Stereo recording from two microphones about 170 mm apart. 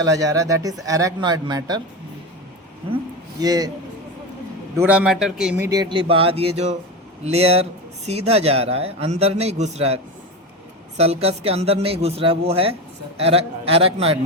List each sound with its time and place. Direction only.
0.0 s speech: 20° right (ahead or behind)
3.4 s speech: 20° right (ahead or behind)
4.8 s a man's voice: 10° right (ahead or behind)
5.5 s a man's voice: 20° right (ahead or behind); by 14.2 s 35° right (ahead or behind)